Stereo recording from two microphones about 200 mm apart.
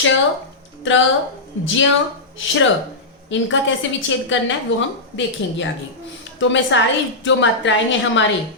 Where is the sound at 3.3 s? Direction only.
70° left (ahead or behind).